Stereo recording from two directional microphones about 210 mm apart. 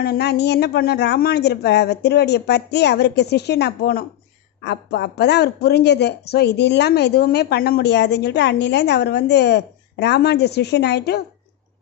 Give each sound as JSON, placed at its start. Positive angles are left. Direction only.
{"t": 0.0, "sound": "speech", "side_deg": 50}